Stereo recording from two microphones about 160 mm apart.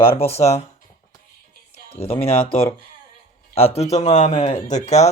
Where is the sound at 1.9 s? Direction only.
35° left (ahead or behind).